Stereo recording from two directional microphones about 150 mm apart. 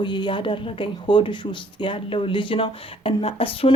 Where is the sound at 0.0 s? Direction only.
30° left (ahead or behind).